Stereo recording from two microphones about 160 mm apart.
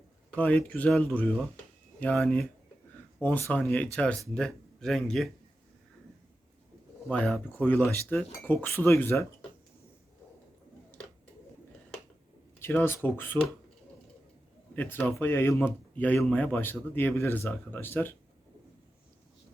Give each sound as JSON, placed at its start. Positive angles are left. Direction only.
{"t": 0.3, "sound": "speech", "side_deg": 10}
{"t": 7.1, "sound": "speech", "side_deg": 5}
{"t": 12.5, "sound": "speech", "side_deg": 15}
{"t": 14.8, "sound": "speech", "side_deg": 10}